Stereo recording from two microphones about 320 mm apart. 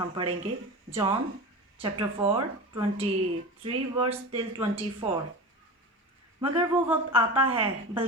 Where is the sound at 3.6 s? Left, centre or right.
Centre.